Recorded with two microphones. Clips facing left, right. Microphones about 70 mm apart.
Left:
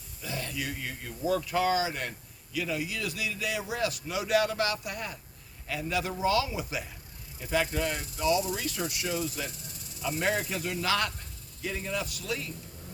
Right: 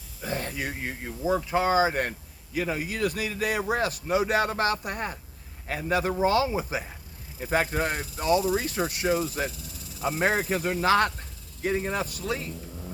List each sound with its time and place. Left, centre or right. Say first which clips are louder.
0.2 s speech: right 4 dB; right
1.9 s speech: right 7 dB; right